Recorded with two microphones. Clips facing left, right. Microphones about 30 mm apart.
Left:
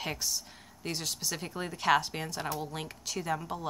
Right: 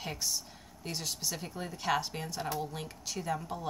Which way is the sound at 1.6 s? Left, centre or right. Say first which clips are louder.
Left 5 dB; left.